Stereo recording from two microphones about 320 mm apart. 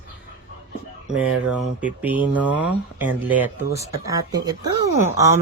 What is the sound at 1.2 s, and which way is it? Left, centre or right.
Speech, centre.